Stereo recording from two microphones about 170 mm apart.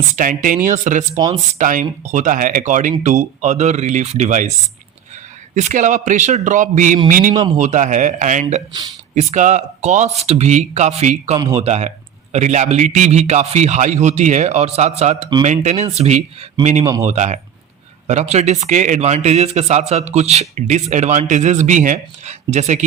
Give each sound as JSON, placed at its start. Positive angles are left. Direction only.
{"t": 0.2, "sound": "speech", "side_deg": -55}
{"t": 5.5, "sound": "a man's voice", "side_deg": -45}
{"t": 16.8, "sound": "speech", "side_deg": -20}
{"t": 17.1, "sound": "a man's voice", "side_deg": -45}